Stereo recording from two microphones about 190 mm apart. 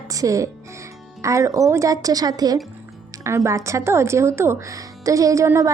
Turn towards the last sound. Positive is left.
turn(degrees=-15)  # may be behind; listen again after turning